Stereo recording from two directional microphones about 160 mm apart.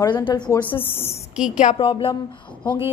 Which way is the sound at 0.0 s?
25° left (ahead or behind).